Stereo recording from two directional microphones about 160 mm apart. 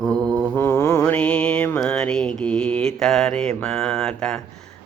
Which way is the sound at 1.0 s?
5° left (ahead or behind).